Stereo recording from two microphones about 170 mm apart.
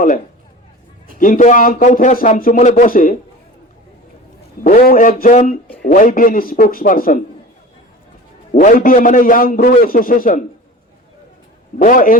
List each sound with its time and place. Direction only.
1.2 s speech: 50° left (ahead or behind)
4.6 s a man's voice: 55° left (ahead or behind)
8.5 s a man's voice: 55° left (ahead or behind)
11.8 s speech: 50° left (ahead or behind)